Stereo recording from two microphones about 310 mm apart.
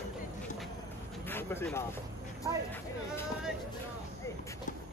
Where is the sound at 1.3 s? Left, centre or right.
Centre.